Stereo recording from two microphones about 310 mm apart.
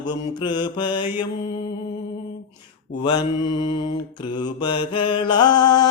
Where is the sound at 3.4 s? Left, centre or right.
Left.